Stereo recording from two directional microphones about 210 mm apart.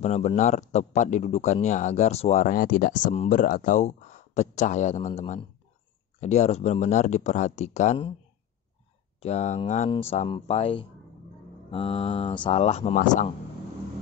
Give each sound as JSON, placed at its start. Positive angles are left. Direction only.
{"t": 0.0, "sound": "speech", "side_deg": 30}
{"t": 9.2, "sound": "speech", "side_deg": 30}